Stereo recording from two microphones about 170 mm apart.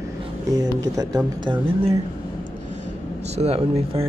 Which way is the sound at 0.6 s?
20° right (ahead or behind).